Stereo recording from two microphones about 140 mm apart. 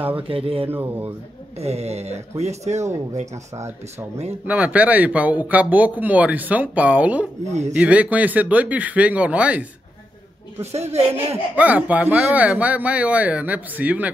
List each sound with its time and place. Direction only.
0.3 s speech: 40° right (ahead or behind)
0.7 s speech: 15° right (ahead or behind)
1.6 s speech: 50° right (ahead or behind)
4.5 s speech: 10° right (ahead or behind)
10.6 s speech: 50° right (ahead or behind)
11.5 s speech: 10° right (ahead or behind)